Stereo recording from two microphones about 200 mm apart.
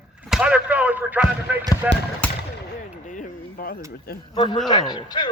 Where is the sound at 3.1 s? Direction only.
40° left (ahead or behind).